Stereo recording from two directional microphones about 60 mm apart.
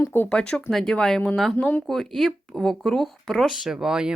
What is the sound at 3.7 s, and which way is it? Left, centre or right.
Speech, centre.